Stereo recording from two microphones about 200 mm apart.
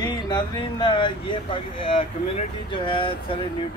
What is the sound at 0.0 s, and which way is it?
Speech, 20° left (ahead or behind).